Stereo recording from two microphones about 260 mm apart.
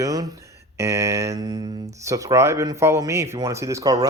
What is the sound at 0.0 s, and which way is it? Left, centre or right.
Speech, centre.